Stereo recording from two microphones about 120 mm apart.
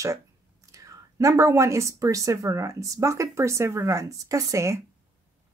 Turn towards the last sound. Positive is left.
turn(degrees=-25)  # may be behind; listen again after turning